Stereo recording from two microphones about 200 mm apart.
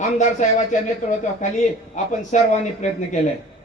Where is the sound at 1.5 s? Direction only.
35° left (ahead or behind).